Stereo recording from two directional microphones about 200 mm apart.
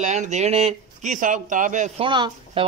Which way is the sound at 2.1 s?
25° right (ahead or behind).